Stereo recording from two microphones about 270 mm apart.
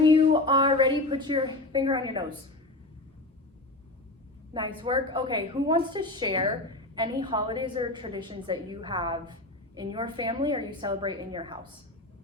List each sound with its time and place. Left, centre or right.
0.0 s a woman's voice: centre
4.5 s a woman's voice: centre